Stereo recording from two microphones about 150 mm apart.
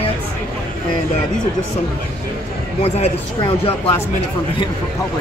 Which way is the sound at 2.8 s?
40° left (ahead or behind).